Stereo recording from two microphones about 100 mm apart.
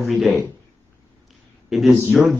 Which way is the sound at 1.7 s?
Centre (ahead or behind).